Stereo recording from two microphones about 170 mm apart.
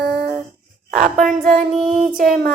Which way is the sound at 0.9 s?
50° right (ahead or behind).